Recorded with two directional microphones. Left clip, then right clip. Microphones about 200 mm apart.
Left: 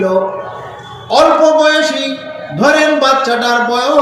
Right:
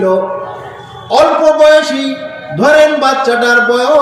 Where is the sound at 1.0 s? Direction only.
25° left (ahead or behind).